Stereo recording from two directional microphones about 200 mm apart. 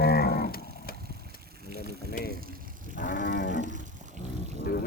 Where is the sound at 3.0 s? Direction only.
40° left (ahead or behind).